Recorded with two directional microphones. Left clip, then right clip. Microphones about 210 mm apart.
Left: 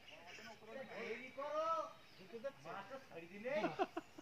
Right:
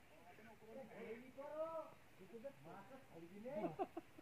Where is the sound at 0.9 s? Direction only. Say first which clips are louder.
Left 7 dB; 10° left (ahead or behind).